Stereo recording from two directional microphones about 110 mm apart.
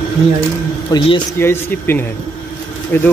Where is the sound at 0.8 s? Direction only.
45° left (ahead or behind).